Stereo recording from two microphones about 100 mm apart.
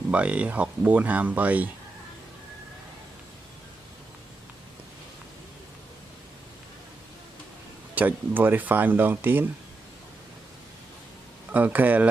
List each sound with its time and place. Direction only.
0.1 s speech: 10° right (ahead or behind)
7.9 s speech: 20° right (ahead or behind)
11.5 s speech: 15° right (ahead or behind)